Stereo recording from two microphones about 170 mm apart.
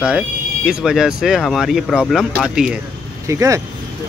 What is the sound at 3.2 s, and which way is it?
Speech, 20° right (ahead or behind).